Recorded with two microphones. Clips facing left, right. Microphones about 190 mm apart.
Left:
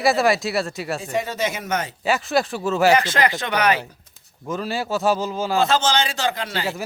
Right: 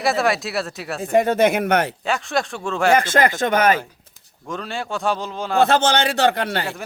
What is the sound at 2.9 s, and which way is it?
Speech, 50° right (ahead or behind).